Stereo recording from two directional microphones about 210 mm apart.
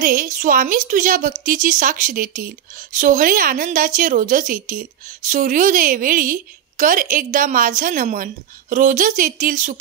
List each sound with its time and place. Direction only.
0.0 s a woman's voice: 40° right (ahead or behind)